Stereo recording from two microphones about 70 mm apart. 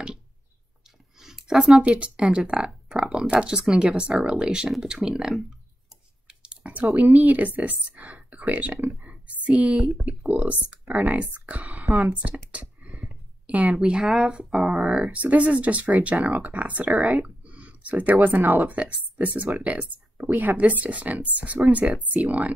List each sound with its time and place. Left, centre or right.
1.2 s a sound: centre
1.8 s speech: centre
6.2 s a sound: centre
7.0 s speech: right
9.0 s whispering: centre
9.8 s speech: centre
10.4 s speech: right
11.3 s a sound: right
12.1 s speech: right
13.5 s speech: centre